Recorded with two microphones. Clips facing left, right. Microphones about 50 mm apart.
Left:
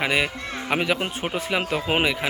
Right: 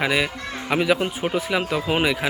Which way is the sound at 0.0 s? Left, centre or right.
Centre.